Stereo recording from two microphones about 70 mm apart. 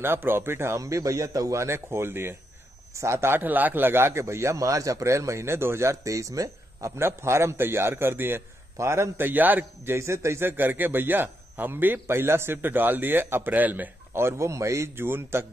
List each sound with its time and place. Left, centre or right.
0.0 s a man's voice: right
0.7 s a man's voice: right
2.9 s a man's voice: right
7.0 s a man's voice: right
9.9 s speech: right
14.2 s a man's voice: right